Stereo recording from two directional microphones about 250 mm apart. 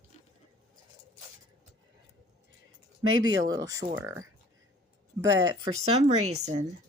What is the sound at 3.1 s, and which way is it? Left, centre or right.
Speech, right.